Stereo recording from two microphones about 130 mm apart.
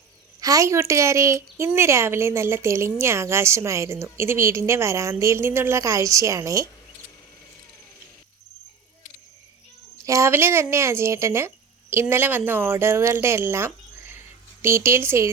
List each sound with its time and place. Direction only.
0.3 s a woman's voice: 25° right (ahead or behind)
10.1 s a woman's voice: 20° right (ahead or behind)